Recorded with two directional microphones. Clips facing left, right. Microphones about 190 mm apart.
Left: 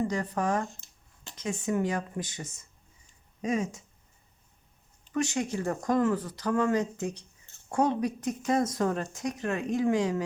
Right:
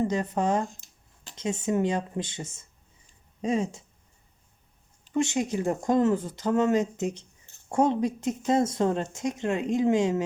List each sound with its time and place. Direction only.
0.0 s speech: 20° right (ahead or behind)
5.1 s speech: 20° right (ahead or behind)